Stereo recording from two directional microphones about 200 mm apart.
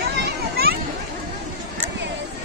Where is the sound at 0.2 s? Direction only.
50° right (ahead or behind).